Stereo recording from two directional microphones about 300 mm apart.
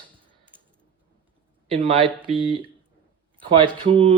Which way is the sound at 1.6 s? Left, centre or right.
Centre.